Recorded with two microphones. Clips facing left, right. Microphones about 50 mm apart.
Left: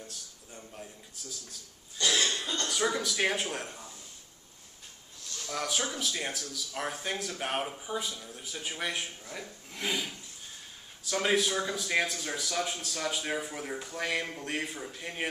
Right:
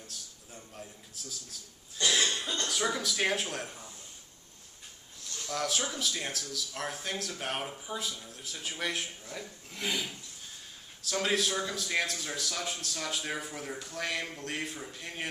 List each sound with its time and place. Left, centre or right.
2.0 s cough: centre
2.6 s speech: centre
5.5 s a man's voice: centre